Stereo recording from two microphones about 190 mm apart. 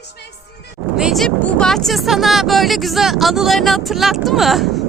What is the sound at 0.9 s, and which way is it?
Speech, centre (ahead or behind).